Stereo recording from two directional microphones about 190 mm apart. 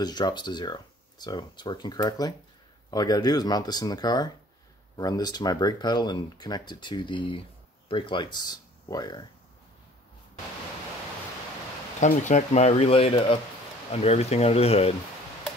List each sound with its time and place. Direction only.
0.0 s speech: 20° left (ahead or behind)
12.0 s speech: 40° left (ahead or behind)